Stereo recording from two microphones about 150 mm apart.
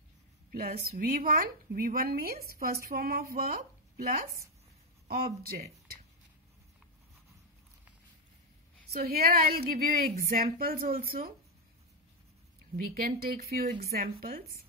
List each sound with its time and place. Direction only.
0.5 s a woman's voice: 85° right
2.9 s speech: 80° right
8.9 s a woman's voice: 90° right
12.7 s a woman's voice: 75° right (ahead or behind)